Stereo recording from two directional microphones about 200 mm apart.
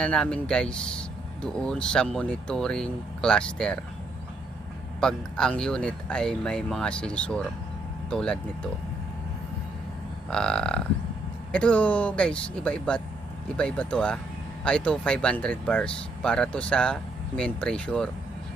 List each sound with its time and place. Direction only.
0.0 s speech: 5° left (ahead or behind)
4.9 s speech: 5° left (ahead or behind)
10.2 s speech: 5° left (ahead or behind)